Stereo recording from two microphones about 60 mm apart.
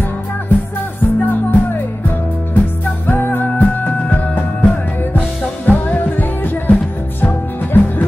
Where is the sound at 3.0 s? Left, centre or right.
Left.